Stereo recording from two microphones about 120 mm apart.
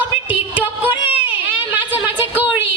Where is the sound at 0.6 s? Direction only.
15° right (ahead or behind).